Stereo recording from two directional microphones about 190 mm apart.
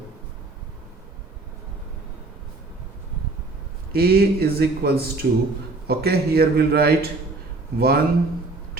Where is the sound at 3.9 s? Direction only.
55° right (ahead or behind).